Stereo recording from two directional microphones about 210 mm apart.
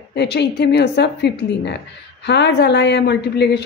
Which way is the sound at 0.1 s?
55° left (ahead or behind).